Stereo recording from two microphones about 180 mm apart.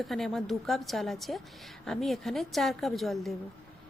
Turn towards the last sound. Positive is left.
turn(degrees=0)  # may be behind; listen again after turning